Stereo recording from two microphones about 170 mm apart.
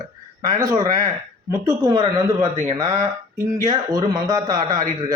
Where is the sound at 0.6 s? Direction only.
20° right (ahead or behind).